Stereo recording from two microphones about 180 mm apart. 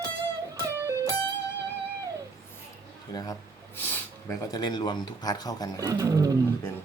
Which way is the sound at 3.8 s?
20° left (ahead or behind).